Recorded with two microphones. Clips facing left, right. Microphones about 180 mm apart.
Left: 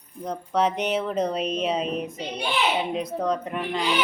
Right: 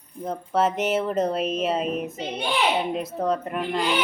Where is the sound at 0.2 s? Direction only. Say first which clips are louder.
Right 1 dB; 5° right (ahead or behind).